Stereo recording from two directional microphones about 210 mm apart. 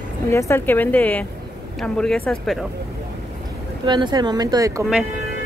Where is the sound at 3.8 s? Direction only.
20° right (ahead or behind).